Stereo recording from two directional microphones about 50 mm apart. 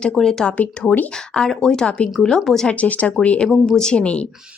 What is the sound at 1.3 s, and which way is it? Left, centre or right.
A woman's voice, centre.